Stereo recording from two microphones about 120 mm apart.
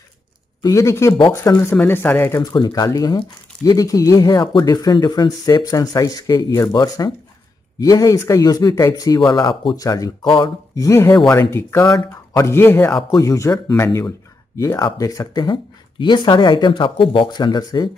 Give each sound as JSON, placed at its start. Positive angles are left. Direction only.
{"t": 0.6, "sound": "speech", "side_deg": 25}
{"t": 2.3, "sound": "speech", "side_deg": 35}
{"t": 10.2, "sound": "speech", "side_deg": 45}
{"t": 10.7, "sound": "speech", "side_deg": 25}